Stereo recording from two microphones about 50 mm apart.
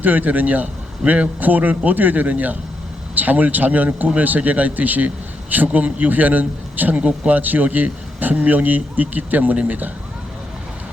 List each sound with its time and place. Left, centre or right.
0.0 s speech: right